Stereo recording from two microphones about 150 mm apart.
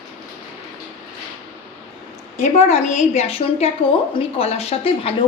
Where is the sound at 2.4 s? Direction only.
55° left (ahead or behind).